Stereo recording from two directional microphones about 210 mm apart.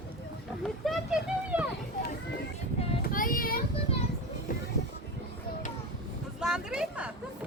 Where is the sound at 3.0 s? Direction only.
40° left (ahead or behind).